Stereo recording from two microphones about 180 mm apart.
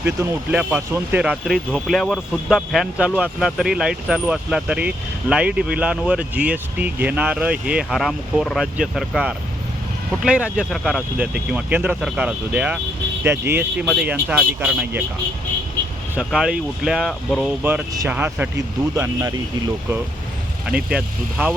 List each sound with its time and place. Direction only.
0.0 s speech: 10° right (ahead or behind)
16.1 s speech: 5° right (ahead or behind)
17.6 s speech: 10° right (ahead or behind)
20.7 s speech: 5° right (ahead or behind)